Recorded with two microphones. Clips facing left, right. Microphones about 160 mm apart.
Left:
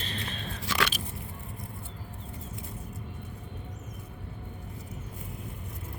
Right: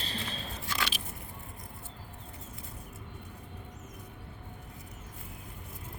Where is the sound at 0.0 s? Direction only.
35° right (ahead or behind).